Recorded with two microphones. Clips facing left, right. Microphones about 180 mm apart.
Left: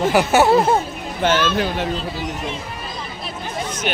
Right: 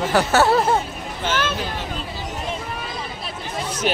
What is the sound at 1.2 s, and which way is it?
Speech, 60° left (ahead or behind).